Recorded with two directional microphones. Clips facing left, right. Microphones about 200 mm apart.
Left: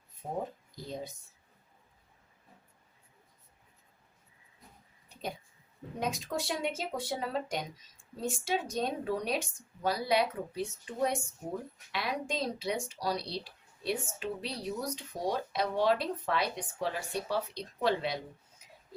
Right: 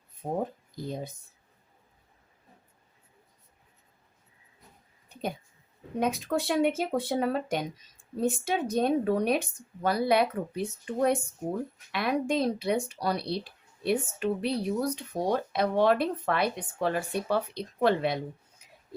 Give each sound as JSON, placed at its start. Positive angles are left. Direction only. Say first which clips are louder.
{"t": 0.2, "sound": "speech", "louder": "right 5 dB", "side_deg": -40}
{"t": 0.8, "sound": "speech", "louder": "right 5 dB", "side_deg": -55}
{"t": 6.0, "sound": "speech", "louder": "right 7 dB", "side_deg": -60}